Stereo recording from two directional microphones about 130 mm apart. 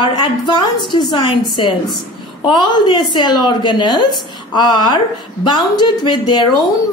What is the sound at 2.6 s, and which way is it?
Speech, 35° left (ahead or behind).